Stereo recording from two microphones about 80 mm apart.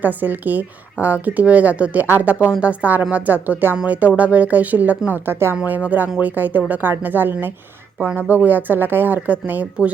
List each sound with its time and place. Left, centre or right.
0.0 s speech: right